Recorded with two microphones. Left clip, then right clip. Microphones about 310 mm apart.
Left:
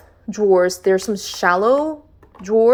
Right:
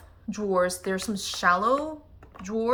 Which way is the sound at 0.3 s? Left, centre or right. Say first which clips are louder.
Left 10 dB; centre.